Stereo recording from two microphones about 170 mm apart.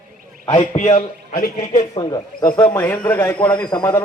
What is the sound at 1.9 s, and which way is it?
Speech, 25° left (ahead or behind).